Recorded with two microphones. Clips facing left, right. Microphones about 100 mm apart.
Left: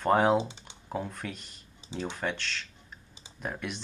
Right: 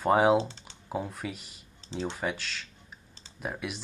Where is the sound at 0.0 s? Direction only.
5° right (ahead or behind).